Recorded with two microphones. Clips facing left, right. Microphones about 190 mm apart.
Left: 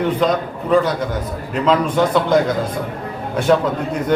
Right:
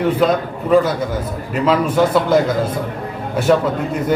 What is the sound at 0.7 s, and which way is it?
A man's voice, 5° right (ahead or behind).